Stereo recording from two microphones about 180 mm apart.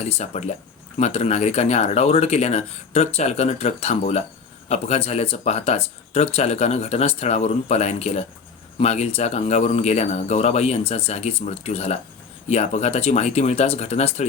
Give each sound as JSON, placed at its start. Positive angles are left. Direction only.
{"t": 0.0, "sound": "speech", "side_deg": 40}